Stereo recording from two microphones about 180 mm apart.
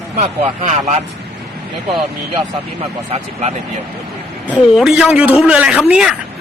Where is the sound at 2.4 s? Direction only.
35° right (ahead or behind).